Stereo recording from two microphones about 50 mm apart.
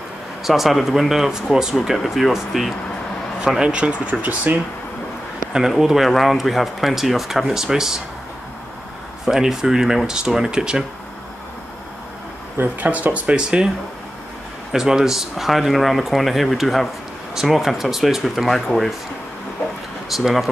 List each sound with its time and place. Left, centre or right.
0.4 s a man's voice: centre
3.3 s speech: centre
5.7 s a man's voice: centre
9.2 s speech: centre
12.8 s speech: right
14.7 s a man's voice: centre
20.1 s a man's voice: centre